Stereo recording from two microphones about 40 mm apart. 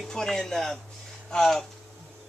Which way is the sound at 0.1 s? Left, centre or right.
Centre.